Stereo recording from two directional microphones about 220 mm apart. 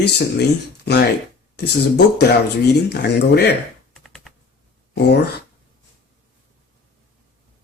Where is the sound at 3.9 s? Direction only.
Centre (ahead or behind).